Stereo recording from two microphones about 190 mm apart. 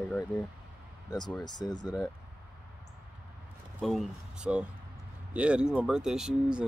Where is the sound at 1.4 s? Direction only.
20° left (ahead or behind).